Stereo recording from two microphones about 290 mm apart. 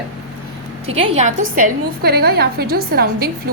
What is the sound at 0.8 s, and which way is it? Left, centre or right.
A woman's voice, right.